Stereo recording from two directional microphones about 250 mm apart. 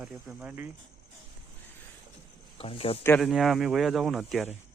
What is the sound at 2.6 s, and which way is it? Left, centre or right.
Speech, left.